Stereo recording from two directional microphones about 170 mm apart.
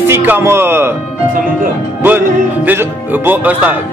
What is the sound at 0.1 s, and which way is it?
Speech, 15° right (ahead or behind).